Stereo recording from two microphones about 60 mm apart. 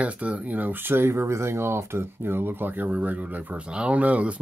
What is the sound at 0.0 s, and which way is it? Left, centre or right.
Speech, right.